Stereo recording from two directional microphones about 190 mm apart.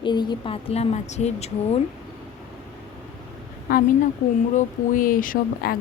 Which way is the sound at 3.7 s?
50° left (ahead or behind).